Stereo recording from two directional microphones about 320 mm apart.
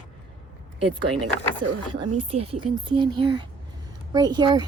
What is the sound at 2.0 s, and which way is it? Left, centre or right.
A woman's voice, centre.